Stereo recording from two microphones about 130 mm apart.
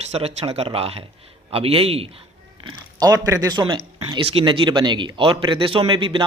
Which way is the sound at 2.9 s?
30° right (ahead or behind).